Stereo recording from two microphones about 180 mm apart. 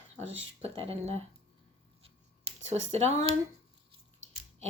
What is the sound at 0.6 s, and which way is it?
Speech, 35° right (ahead or behind).